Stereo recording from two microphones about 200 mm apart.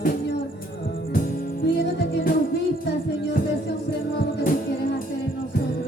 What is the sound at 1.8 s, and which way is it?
Music, 60° left (ahead or behind).